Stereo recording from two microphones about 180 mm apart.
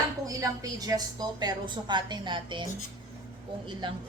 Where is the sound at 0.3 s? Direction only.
20° right (ahead or behind).